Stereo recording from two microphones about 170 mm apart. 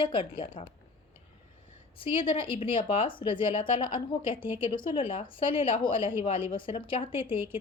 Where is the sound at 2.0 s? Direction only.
30° left (ahead or behind).